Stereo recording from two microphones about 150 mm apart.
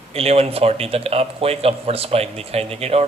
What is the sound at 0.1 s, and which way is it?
A man's voice, 40° right (ahead or behind).